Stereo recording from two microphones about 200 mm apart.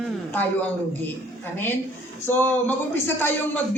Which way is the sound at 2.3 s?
10° left (ahead or behind).